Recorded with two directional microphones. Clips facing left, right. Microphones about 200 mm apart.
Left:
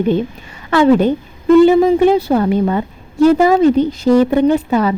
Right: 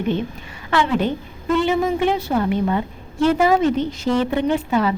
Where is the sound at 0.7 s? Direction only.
45° left (ahead or behind).